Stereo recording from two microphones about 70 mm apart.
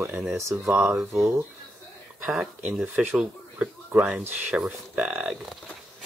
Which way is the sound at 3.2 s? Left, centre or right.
Right.